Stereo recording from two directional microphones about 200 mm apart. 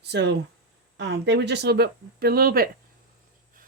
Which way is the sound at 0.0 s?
60° right (ahead or behind).